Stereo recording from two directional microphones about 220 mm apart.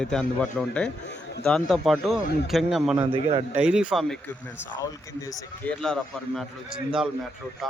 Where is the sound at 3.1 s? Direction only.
25° right (ahead or behind).